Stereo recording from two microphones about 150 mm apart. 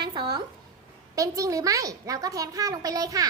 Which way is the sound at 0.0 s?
30° right (ahead or behind).